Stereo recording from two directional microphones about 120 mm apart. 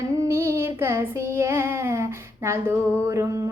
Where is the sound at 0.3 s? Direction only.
20° right (ahead or behind).